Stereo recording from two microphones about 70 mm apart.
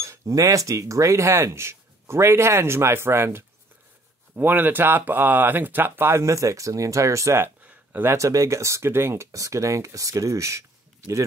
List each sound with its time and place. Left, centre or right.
0.0 s speech: right
6.2 s speech: right
7.6 s a sound: right
8.2 s speech: right
9.3 s speech: right